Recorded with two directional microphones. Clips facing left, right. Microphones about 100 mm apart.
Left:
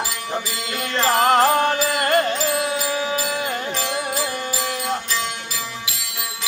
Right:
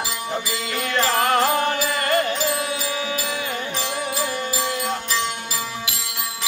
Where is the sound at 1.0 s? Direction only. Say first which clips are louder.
Left 4 dB; 35° left (ahead or behind).